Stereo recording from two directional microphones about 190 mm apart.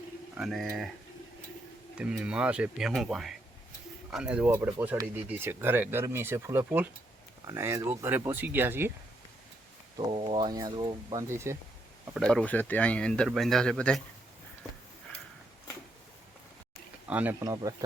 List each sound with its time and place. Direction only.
0.3 s speech: centre (ahead or behind)
2.0 s speech: 5° right (ahead or behind)
10.1 s speech: 25° right (ahead or behind)
12.1 s speech: 5° left (ahead or behind)
17.1 s speech: 10° right (ahead or behind)
17.4 s speech: 20° right (ahead or behind)